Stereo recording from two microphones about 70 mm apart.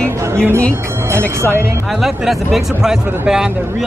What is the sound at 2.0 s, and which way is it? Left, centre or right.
A man's voice, centre.